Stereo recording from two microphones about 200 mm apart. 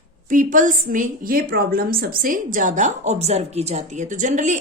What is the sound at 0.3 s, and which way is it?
A woman's voice, 40° right (ahead or behind).